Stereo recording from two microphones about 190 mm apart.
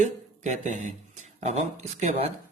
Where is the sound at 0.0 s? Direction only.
40° right (ahead or behind).